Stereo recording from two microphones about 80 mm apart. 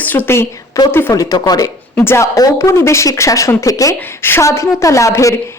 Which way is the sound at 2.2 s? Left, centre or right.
Left.